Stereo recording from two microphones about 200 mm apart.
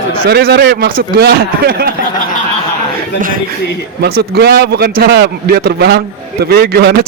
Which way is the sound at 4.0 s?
50° right (ahead or behind).